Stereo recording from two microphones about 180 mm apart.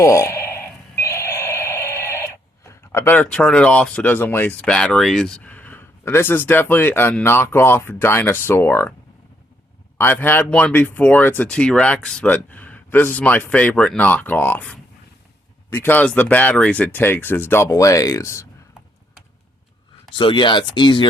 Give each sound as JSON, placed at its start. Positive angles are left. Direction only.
{"t": 0.0, "sound": "a sound", "side_deg": 15}
{"t": 2.9, "sound": "speech", "side_deg": 15}
{"t": 10.0, "sound": "speech", "side_deg": 10}
{"t": 20.1, "sound": "speech", "side_deg": 25}